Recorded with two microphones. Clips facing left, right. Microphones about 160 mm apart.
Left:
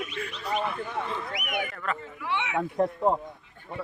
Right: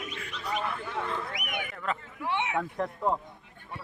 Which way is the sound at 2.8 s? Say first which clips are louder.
Left 7 dB; 30° left (ahead or behind).